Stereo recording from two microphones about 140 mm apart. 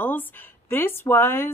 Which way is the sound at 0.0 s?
15° left (ahead or behind).